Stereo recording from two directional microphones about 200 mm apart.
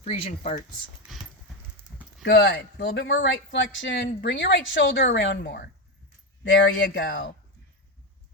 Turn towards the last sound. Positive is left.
turn(degrees=50)  # may be behind; listen again after turning